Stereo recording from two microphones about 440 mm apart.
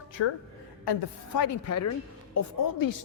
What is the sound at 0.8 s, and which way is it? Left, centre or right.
Speech, left.